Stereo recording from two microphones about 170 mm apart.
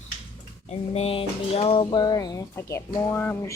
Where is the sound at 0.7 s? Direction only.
35° left (ahead or behind).